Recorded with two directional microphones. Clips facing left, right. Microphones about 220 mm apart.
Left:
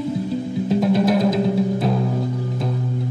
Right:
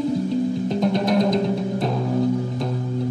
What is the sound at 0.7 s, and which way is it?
Music, 5° left (ahead or behind).